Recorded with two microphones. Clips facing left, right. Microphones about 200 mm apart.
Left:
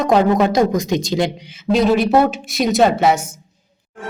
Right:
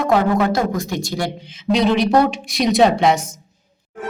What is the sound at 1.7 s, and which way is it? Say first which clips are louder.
A woman's voice: left 1 dB; 5° left (ahead or behind).